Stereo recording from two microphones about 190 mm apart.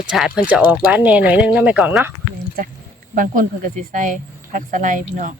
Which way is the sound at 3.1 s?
45° right (ahead or behind).